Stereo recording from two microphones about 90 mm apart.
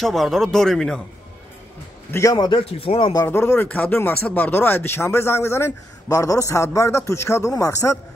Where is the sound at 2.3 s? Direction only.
50° left (ahead or behind).